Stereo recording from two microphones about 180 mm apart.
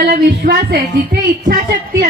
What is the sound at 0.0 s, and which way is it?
Speech, 60° right (ahead or behind).